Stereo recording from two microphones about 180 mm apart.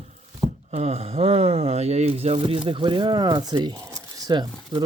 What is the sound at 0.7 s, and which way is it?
Speech, 35° right (ahead or behind).